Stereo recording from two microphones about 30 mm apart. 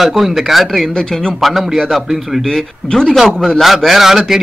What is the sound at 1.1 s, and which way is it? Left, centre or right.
Speech, centre.